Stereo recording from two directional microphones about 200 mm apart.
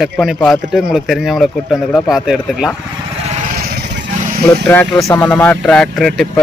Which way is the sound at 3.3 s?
40° right (ahead or behind).